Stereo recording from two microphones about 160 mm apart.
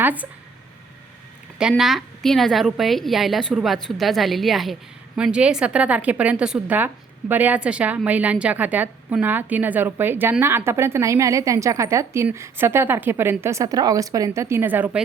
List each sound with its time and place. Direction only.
0.0 s speech: 10° right (ahead or behind)
1.5 s a woman's voice: 5° right (ahead or behind)